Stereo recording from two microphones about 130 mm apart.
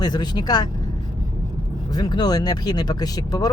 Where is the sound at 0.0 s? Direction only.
35° left (ahead or behind).